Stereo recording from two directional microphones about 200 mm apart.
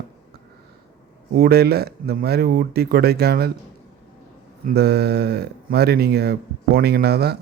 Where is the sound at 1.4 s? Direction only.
50° right (ahead or behind).